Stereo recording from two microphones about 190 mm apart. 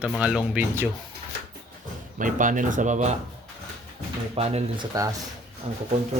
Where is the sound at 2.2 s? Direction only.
45° right (ahead or behind).